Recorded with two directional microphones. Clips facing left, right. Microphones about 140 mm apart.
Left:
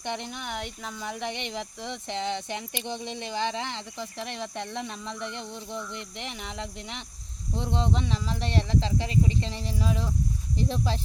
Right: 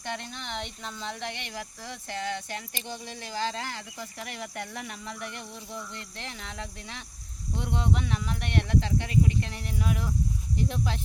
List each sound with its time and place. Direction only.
0.0 s speech: 20° left (ahead or behind)
7.5 s speech: 30° left (ahead or behind)